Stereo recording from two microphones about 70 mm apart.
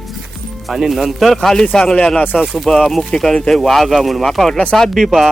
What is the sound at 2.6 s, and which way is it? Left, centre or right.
Speech, centre.